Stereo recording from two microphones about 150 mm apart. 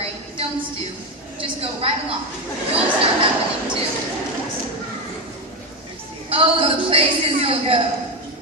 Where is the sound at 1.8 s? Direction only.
40° right (ahead or behind).